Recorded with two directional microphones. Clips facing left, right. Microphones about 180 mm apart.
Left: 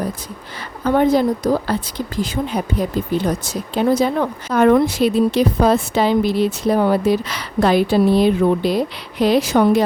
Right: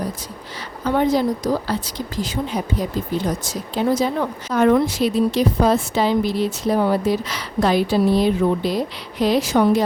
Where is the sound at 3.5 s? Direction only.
60° left (ahead or behind).